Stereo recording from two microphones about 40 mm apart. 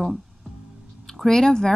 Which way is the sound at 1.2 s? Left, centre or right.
Centre.